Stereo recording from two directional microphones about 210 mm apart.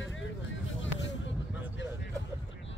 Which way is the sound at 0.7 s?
60° left (ahead or behind).